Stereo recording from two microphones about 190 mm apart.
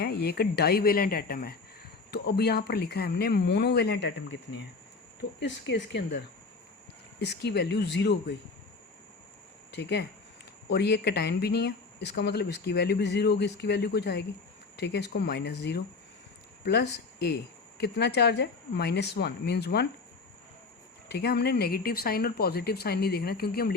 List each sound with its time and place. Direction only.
0.0 s speech: 55° left (ahead or behind)
5.4 s speech: 70° left (ahead or behind)
9.7 s speech: 65° left (ahead or behind)
21.1 s speech: 60° left (ahead or behind)